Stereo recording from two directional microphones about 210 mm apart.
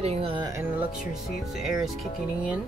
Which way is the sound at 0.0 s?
30° right (ahead or behind).